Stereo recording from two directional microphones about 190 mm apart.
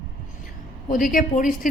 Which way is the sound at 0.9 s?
45° left (ahead or behind).